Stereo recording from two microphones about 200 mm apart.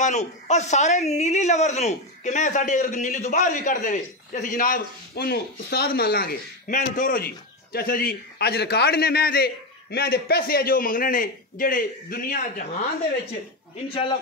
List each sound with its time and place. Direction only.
0.0 s a woman's voice: 35° left (ahead or behind)